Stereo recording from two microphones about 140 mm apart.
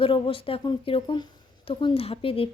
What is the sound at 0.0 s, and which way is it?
Speech, 40° left (ahead or behind).